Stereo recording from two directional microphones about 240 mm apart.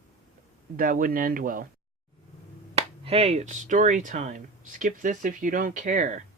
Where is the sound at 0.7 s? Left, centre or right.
Right.